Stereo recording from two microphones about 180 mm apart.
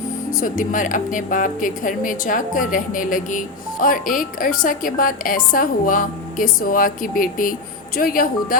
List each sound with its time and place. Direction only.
0.3 s speech: 50° left (ahead or behind)